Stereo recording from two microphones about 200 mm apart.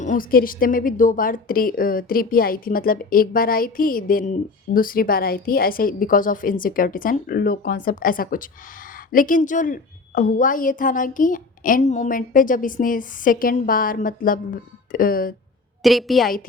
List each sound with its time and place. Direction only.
0.0 s a woman's voice: 40° left (ahead or behind)
15.8 s a woman's voice: centre (ahead or behind)